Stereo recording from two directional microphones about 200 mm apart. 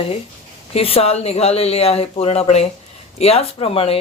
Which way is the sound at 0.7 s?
30° left (ahead or behind).